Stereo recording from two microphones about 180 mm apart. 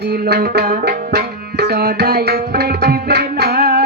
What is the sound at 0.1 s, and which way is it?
Tabla, 60° right (ahead or behind).